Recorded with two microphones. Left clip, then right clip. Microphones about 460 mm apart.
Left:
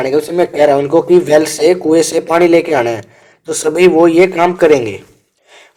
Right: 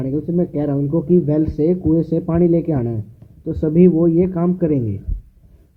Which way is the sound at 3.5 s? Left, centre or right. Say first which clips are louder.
Left 6 dB; centre.